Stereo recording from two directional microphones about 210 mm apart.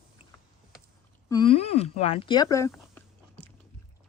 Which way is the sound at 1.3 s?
25° left (ahead or behind).